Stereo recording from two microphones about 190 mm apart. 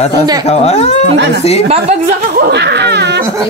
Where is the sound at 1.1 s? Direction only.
60° right (ahead or behind).